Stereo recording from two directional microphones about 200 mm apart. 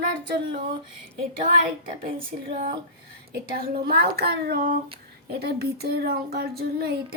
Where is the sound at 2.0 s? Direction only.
30° right (ahead or behind).